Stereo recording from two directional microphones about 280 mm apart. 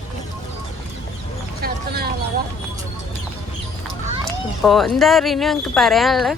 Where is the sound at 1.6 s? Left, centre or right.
Right.